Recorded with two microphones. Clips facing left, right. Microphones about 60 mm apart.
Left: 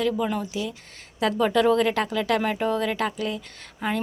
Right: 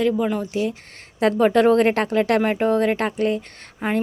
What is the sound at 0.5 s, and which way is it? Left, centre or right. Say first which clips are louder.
A woman's voice: right 7 dB; right.